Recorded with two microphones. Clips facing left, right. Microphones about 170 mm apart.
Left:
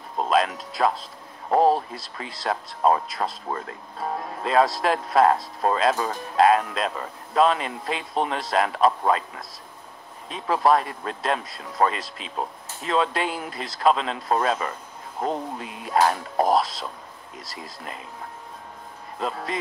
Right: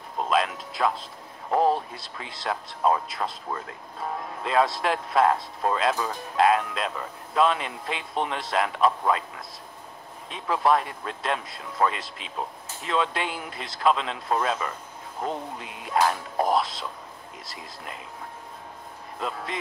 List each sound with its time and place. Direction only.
0.3 s music: 40° left (ahead or behind)
1.5 s speech: 35° left (ahead or behind)
10.3 s speech: 40° left (ahead or behind)